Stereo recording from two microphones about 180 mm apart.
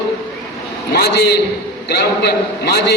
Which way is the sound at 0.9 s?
65° left (ahead or behind).